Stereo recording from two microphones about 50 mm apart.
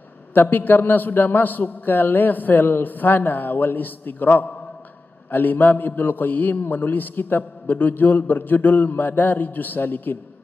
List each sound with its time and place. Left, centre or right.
0.3 s a man's voice: left